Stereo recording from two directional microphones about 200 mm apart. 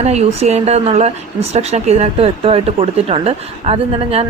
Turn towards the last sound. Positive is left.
turn(degrees=-30)  # may be behind; listen again after turning